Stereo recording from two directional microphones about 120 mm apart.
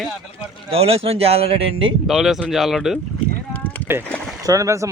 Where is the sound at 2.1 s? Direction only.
5° right (ahead or behind).